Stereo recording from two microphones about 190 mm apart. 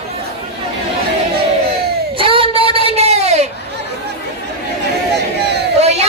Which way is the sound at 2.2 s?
30° right (ahead or behind).